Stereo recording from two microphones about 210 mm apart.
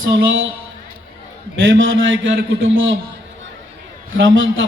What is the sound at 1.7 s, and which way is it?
A man's voice, 65° right (ahead or behind).